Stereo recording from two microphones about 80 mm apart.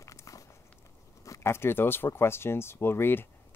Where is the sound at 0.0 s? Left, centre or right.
Left.